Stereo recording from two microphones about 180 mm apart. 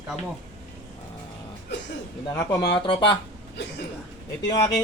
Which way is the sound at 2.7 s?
25° left (ahead or behind).